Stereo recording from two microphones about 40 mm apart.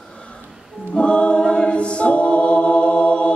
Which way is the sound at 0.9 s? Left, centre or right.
Left.